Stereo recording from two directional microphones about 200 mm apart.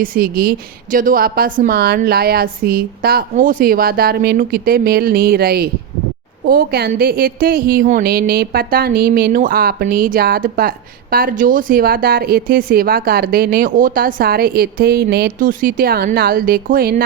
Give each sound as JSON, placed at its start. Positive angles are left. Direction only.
{"t": 0.0, "sound": "a woman's voice", "side_deg": -45}